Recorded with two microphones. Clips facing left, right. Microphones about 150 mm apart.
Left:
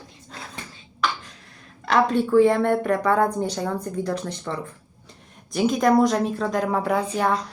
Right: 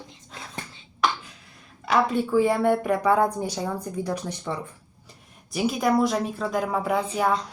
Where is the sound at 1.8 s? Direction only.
5° right (ahead or behind).